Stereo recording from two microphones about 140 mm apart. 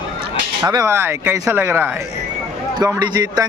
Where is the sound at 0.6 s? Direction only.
25° right (ahead or behind).